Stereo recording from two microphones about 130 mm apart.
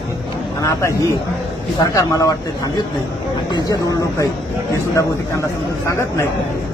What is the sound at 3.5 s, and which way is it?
Speech, 30° left (ahead or behind).